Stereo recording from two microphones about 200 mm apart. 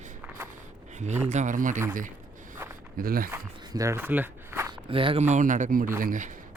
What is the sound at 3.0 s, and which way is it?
Speech, 45° right (ahead or behind).